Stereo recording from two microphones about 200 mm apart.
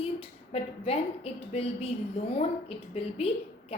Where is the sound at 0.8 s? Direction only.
30° left (ahead or behind).